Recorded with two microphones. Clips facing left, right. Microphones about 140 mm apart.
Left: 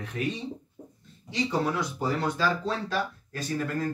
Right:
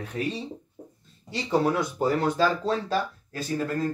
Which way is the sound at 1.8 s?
45° right (ahead or behind).